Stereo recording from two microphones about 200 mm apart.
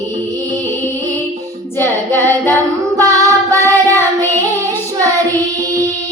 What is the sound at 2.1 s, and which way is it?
Singing, 10° left (ahead or behind).